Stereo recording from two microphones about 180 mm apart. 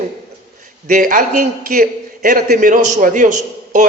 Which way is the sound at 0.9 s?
45° right (ahead or behind).